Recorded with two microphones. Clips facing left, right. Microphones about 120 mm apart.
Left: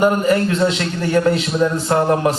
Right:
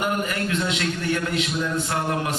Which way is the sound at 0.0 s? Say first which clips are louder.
Left 10 dB; 35° left (ahead or behind).